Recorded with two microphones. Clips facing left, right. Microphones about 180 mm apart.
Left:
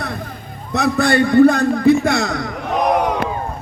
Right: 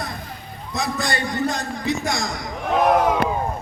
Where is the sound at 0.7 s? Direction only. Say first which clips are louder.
Left 9 dB; 60° left (ahead or behind).